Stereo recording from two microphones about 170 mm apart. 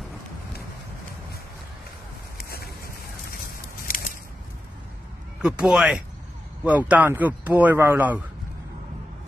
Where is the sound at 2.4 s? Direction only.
65° left (ahead or behind).